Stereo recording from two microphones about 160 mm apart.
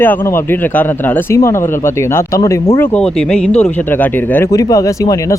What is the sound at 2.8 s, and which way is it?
Speech, 10° left (ahead or behind).